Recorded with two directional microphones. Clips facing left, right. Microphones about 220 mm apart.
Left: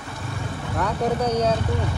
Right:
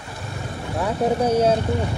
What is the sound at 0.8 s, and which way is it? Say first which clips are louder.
Speech: right 3 dB; 25° right (ahead or behind).